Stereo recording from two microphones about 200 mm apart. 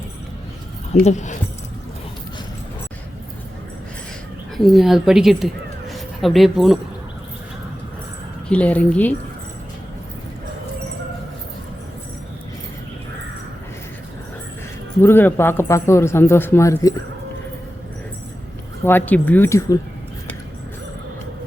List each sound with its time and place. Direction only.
1.0 s speech: 35° left (ahead or behind)
4.5 s speech: centre (ahead or behind)
8.4 s a man's voice: 5° left (ahead or behind)
15.0 s a man's voice: 10° left (ahead or behind)
18.9 s a man's voice: 10° left (ahead or behind)